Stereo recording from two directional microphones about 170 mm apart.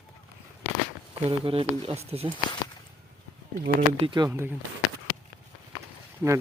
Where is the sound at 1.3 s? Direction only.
30° right (ahead or behind).